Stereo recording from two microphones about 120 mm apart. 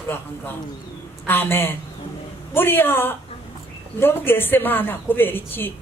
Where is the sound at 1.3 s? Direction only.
20° left (ahead or behind).